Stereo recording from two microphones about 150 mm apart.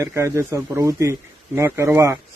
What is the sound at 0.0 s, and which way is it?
A man's voice, 20° right (ahead or behind).